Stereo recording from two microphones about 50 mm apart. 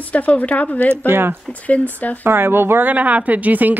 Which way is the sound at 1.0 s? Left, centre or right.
Right.